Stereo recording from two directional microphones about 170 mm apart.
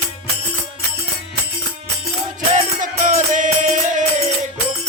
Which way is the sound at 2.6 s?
45° right (ahead or behind).